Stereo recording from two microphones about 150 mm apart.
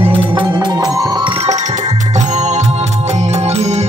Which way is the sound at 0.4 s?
25° right (ahead or behind).